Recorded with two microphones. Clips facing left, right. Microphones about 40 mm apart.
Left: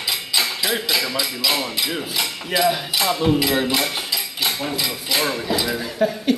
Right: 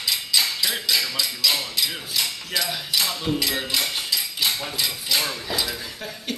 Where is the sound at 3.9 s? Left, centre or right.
Centre.